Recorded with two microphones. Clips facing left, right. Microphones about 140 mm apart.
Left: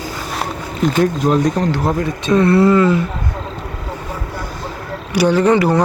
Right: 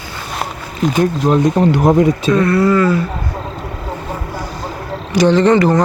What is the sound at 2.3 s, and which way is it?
Speech, 30° left (ahead or behind).